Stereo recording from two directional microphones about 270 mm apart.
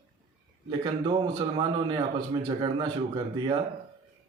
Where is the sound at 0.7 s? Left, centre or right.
Centre.